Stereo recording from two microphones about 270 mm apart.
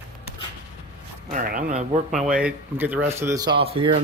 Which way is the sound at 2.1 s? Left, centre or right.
Centre.